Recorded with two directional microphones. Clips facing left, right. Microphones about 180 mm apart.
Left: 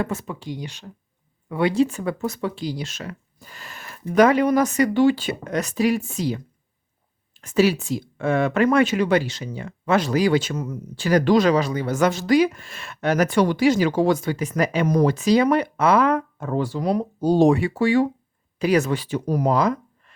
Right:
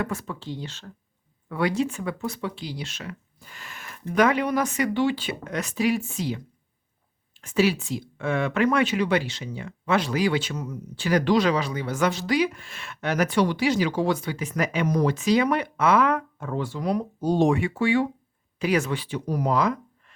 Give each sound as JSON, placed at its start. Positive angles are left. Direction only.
{"t": 0.0, "sound": "speech", "side_deg": 25}
{"t": 7.4, "sound": "speech", "side_deg": 40}